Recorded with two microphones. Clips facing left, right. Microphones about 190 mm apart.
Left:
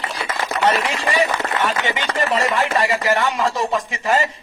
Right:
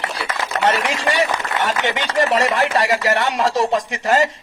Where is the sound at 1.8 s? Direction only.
75° right (ahead or behind).